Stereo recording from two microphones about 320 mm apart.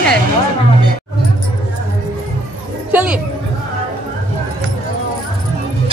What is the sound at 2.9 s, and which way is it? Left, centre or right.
Speech, centre.